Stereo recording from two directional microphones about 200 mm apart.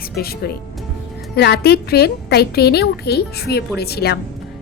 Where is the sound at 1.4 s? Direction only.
55° left (ahead or behind).